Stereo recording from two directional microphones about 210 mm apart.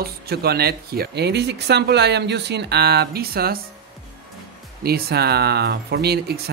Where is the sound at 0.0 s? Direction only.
50° right (ahead or behind).